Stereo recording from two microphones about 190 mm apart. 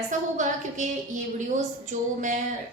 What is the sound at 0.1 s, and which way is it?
A woman's voice, 40° right (ahead or behind).